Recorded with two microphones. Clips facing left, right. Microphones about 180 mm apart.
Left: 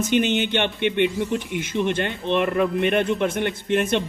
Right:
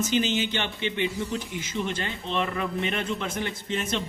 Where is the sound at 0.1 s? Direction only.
60° left (ahead or behind).